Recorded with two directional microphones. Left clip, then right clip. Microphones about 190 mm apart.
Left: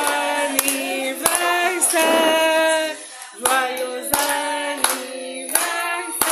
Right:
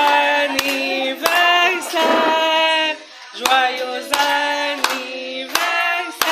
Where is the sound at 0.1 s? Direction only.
40° left (ahead or behind).